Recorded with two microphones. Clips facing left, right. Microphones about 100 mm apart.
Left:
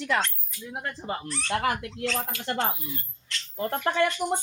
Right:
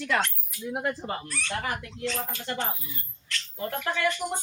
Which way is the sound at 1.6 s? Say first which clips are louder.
Left 4 dB; 70° left (ahead or behind).